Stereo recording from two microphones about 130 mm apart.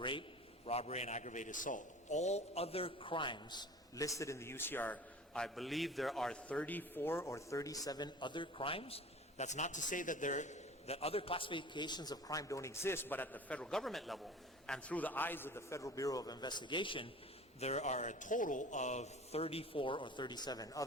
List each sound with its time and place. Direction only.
0.0 s a man's voice: 40° left (ahead or behind)
9.4 s a man's voice: 65° left (ahead or behind); by 17.1 s 40° left (ahead or behind)
17.6 s a man's voice: 60° left (ahead or behind); by 20.8 s 30° left (ahead or behind)